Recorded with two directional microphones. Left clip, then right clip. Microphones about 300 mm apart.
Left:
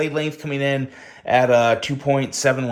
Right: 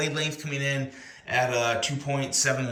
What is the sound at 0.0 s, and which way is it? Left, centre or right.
Speech, centre.